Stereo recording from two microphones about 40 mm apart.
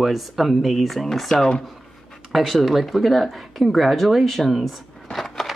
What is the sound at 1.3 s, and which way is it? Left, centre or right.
Speech, centre.